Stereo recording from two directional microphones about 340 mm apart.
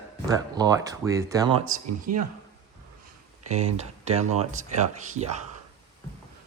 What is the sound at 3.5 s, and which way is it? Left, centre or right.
Speech, centre.